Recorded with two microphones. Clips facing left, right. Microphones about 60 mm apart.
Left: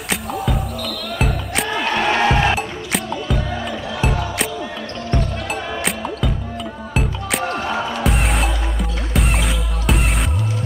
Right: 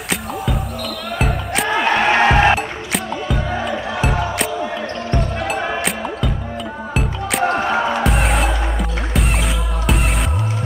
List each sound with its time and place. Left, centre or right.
1.1 s music: centre
1.7 s music: right
2.5 s music: centre
5.1 s music: centre
7.4 s music: right
8.0 s music: centre